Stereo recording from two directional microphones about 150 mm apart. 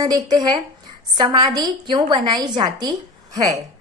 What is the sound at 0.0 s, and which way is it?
A woman's voice, 25° right (ahead or behind).